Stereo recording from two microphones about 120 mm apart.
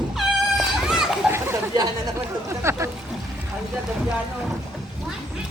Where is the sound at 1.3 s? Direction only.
20° right (ahead or behind).